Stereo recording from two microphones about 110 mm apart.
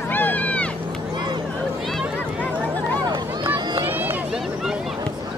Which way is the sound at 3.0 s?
40° right (ahead or behind).